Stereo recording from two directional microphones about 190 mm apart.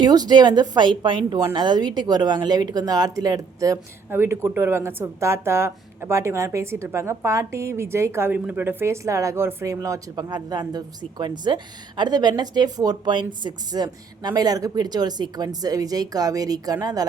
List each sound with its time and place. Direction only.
0.0 s speech: 20° right (ahead or behind)